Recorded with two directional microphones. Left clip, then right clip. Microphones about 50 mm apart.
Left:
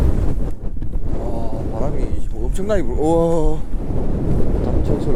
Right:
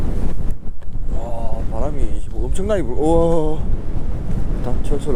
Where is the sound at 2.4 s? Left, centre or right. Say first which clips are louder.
Even; left.